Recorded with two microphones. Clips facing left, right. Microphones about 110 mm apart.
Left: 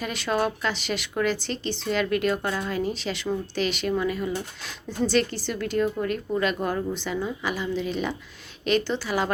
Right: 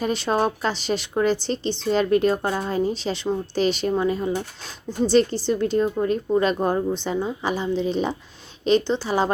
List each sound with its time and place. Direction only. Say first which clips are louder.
0.0 s speech: right 4 dB; 30° right (ahead or behind)